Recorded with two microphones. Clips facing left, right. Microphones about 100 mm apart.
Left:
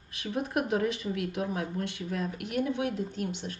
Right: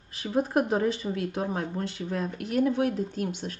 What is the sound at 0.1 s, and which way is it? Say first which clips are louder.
Speech: right 5 dB; 35° right (ahead or behind).